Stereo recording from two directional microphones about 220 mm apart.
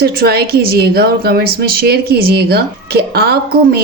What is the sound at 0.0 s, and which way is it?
A woman's voice, 45° right (ahead or behind).